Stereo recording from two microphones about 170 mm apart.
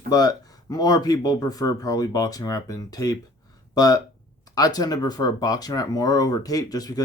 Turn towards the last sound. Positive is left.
turn(degrees=20)  # may be behind; listen again after turning